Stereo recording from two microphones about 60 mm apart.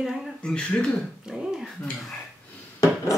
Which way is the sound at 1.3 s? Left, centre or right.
Centre.